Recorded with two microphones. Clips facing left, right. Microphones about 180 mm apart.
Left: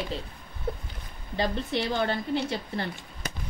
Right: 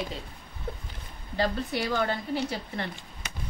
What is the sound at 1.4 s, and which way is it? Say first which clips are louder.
A woman's voice: even; 25° left (ahead or behind).